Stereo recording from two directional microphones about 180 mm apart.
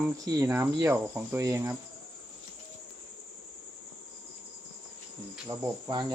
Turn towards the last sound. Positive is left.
turn(degrees=-25)  # may be behind; listen again after turning